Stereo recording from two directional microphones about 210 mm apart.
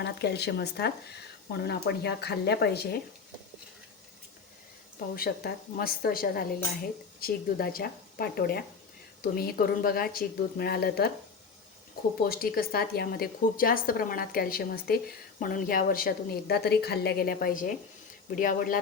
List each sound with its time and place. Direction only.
0.0 s a woman's voice: 50° left (ahead or behind)
4.9 s a woman's voice: 45° left (ahead or behind)
12.2 s a woman's voice: 45° left (ahead or behind)